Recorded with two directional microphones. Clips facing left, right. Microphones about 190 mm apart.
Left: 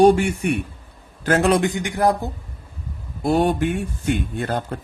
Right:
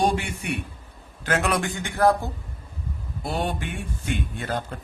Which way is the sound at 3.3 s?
45° left (ahead or behind).